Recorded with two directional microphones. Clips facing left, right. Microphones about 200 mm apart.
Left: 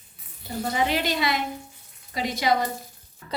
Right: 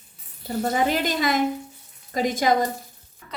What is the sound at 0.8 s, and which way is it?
A woman's voice, 45° right (ahead or behind).